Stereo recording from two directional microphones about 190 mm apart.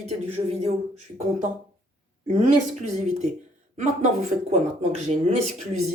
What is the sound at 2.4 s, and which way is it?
Speech, 40° right (ahead or behind).